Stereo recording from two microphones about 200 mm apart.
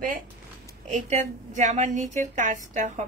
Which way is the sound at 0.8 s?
35° right (ahead or behind).